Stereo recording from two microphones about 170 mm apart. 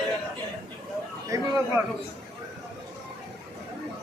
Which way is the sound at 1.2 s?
20° right (ahead or behind).